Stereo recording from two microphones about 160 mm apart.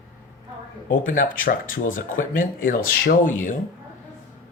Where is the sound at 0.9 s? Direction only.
55° left (ahead or behind).